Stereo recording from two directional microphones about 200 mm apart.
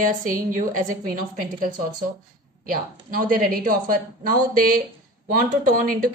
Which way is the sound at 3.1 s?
45° right (ahead or behind).